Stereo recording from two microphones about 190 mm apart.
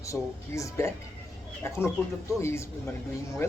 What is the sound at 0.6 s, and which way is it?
A man's voice, 15° left (ahead or behind).